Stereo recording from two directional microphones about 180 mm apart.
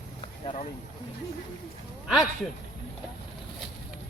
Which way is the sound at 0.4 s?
40° left (ahead or behind).